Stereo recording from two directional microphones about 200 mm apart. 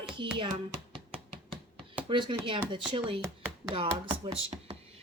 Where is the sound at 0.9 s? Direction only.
30° right (ahead or behind).